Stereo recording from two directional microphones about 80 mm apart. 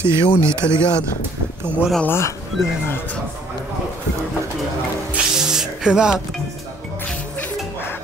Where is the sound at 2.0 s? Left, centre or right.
Left.